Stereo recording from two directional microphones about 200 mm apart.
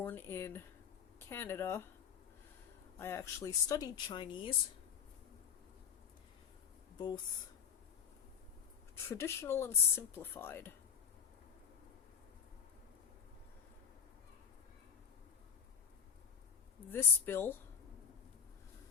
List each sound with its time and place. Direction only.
0.0 s speech: 10° left (ahead or behind)
3.0 s speech: 15° left (ahead or behind)
9.0 s speech: 15° left (ahead or behind)
16.9 s speech: 10° left (ahead or behind)